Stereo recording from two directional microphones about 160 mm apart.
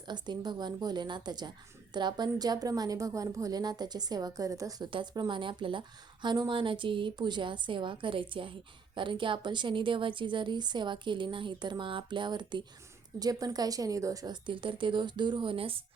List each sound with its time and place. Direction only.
0.1 s a woman's voice: 25° right (ahead or behind)